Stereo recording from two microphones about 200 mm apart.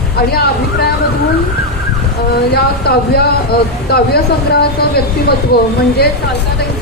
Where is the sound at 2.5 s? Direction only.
55° left (ahead or behind).